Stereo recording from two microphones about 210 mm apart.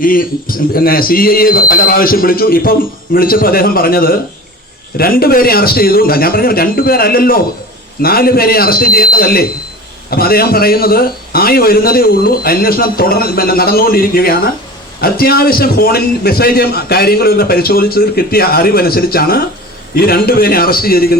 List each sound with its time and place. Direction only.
0.0 s a man's voice: 40° left (ahead or behind)